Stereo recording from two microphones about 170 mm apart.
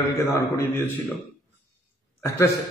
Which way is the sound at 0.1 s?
15° left (ahead or behind).